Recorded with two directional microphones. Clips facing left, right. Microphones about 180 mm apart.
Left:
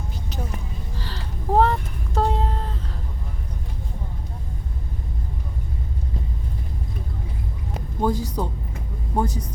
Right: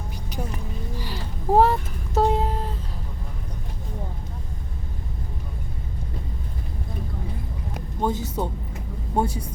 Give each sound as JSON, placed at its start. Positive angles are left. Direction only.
{"t": 0.9, "sound": "vehicle", "side_deg": -10}
{"t": 8.0, "sound": "speech", "side_deg": -20}